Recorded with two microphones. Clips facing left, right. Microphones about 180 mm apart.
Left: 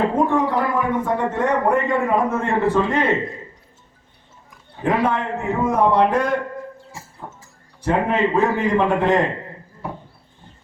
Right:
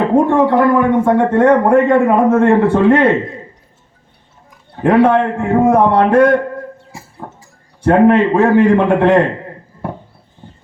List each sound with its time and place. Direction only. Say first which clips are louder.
0.3 s a man's voice: right 9 dB; 70° right (ahead or behind)
4.8 s a man's voice: right 9 dB; 65° right (ahead or behind)
7.2 s a sound: right 5 dB; 60° right (ahead or behind)
7.9 s a man's voice: right 10 dB; 60° right (ahead or behind)